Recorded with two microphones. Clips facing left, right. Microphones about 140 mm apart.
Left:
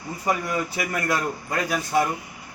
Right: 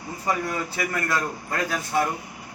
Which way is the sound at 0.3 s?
15° left (ahead or behind).